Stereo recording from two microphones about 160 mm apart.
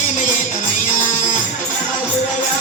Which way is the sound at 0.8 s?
50° left (ahead or behind).